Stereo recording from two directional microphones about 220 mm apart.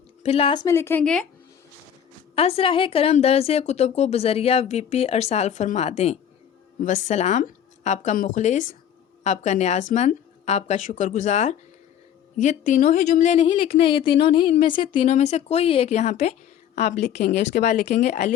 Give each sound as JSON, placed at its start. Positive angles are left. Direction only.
{"t": 0.2, "sound": "a woman's voice", "side_deg": 25}
{"t": 2.3, "sound": "a woman's voice", "side_deg": 25}
{"t": 17.2, "sound": "speech", "side_deg": 45}
{"t": 17.6, "sound": "a woman's voice", "side_deg": 35}